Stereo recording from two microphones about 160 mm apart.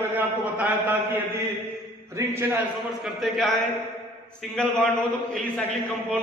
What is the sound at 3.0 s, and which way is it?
A man's voice, centre (ahead or behind).